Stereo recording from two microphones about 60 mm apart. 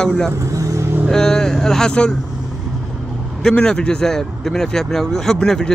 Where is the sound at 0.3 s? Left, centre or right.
Right.